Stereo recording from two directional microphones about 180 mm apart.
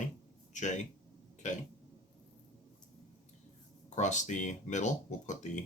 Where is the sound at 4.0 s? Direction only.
40° left (ahead or behind).